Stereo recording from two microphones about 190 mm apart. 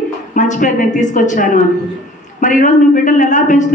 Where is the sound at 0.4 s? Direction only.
40° left (ahead or behind).